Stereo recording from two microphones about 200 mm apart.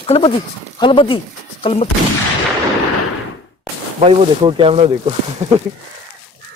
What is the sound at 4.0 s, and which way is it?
Speech, 30° right (ahead or behind).